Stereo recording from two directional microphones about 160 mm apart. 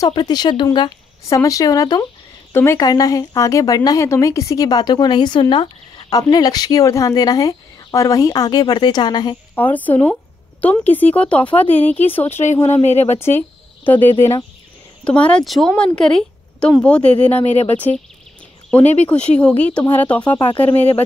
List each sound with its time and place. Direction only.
0.0 s a woman's voice: 25° left (ahead or behind)
9.6 s a woman's voice: 10° left (ahead or behind)
12.8 s speech: 45° left (ahead or behind)
13.2 s a woman's voice: 15° left (ahead or behind)
18.7 s a woman's voice: 10° left (ahead or behind)